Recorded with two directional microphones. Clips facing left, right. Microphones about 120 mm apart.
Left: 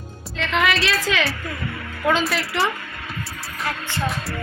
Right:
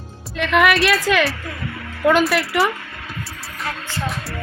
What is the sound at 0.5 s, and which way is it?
Speech, 60° right (ahead or behind).